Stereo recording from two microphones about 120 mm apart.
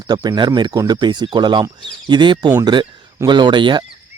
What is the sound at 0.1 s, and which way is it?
Speech, 40° right (ahead or behind).